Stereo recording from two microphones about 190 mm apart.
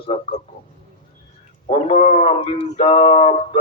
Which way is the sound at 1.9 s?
40° left (ahead or behind).